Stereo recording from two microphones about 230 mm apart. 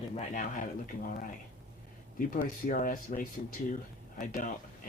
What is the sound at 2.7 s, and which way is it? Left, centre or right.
Speech, left.